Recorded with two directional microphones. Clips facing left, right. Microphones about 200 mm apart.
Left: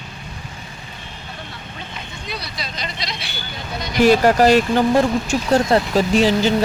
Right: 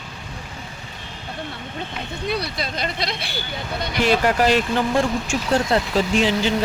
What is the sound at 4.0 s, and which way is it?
Speech, 40° left (ahead or behind).